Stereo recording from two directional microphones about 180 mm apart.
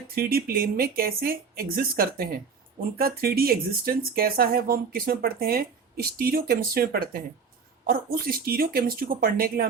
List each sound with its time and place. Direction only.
0.1 s speech: 55° right (ahead or behind)